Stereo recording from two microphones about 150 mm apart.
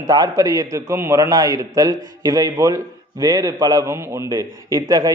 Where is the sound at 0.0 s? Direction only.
25° right (ahead or behind).